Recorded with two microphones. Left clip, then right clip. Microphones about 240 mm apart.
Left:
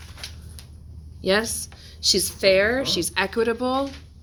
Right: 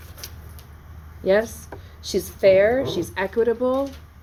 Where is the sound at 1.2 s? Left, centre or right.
Left.